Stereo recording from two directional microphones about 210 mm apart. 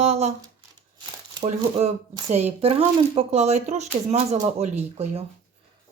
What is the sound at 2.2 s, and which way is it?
Speech, 30° right (ahead or behind).